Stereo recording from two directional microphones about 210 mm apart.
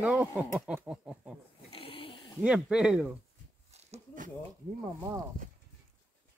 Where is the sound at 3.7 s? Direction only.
30° right (ahead or behind).